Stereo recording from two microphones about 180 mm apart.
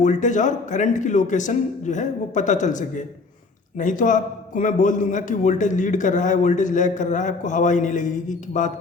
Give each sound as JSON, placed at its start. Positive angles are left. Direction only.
{"t": 0.0, "sound": "a man's voice", "side_deg": 45}